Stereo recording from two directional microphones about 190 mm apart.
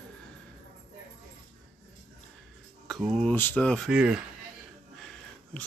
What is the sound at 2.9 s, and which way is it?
Speech, centre (ahead or behind).